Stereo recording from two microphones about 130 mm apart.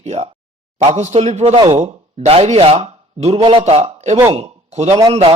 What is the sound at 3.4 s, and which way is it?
Speech, 40° right (ahead or behind).